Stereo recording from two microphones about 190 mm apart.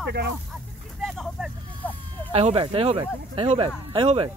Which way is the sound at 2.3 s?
30° right (ahead or behind).